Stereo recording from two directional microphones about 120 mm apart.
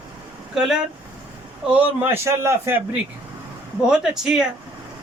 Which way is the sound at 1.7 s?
15° right (ahead or behind).